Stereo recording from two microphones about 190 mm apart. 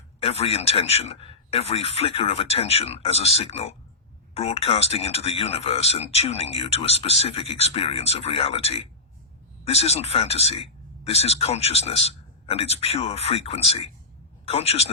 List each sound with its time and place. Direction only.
0.2 s a man's voice: 30° left (ahead or behind)